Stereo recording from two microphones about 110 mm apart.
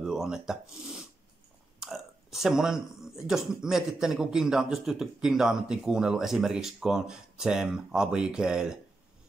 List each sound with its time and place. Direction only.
0.0 s speech: 5° right (ahead or behind)